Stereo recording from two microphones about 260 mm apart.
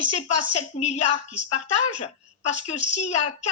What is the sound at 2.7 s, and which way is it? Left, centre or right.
Speech, left.